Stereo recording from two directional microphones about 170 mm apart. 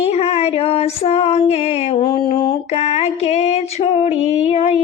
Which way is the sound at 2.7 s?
40° left (ahead or behind).